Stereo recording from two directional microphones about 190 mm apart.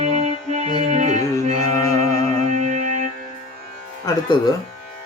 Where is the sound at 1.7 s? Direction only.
15° left (ahead or behind).